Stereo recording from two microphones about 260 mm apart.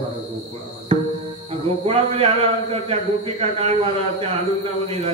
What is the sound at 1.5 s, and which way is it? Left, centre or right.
Cricket, right.